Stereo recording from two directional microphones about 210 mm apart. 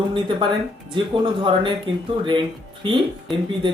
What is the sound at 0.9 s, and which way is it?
Speech, 25° right (ahead or behind).